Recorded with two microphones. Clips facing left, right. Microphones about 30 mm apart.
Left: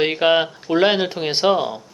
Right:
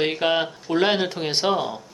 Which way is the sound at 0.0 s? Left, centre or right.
Centre.